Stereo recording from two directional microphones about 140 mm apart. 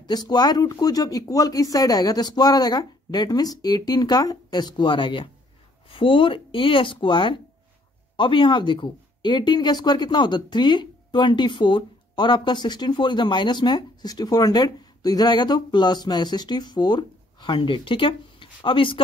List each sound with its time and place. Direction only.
0.0 s speech: 30° left (ahead or behind)